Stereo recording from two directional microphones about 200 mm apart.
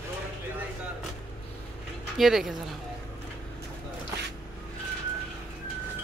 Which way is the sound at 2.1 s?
Centre (ahead or behind).